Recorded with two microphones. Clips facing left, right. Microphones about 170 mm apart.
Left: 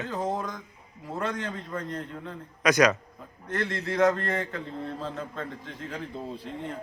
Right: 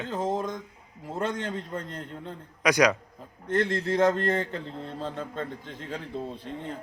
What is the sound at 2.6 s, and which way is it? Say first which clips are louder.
Speech: left 1 dB; 15° right (ahead or behind).